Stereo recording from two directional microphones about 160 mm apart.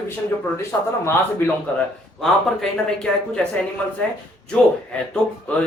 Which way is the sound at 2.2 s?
5° left (ahead or behind).